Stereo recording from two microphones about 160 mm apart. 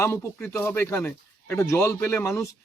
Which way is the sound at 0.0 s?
15° left (ahead or behind).